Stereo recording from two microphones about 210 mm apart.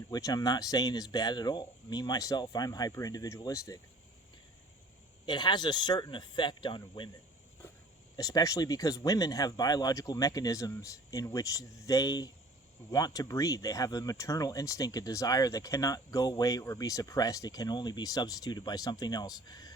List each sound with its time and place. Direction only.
0.1 s speech: 15° left (ahead or behind)
5.2 s speech: 20° left (ahead or behind)
8.1 s speech: 15° left (ahead or behind)